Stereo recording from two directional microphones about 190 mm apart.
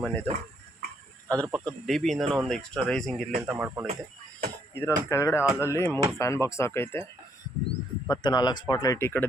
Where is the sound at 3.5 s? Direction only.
10° right (ahead or behind).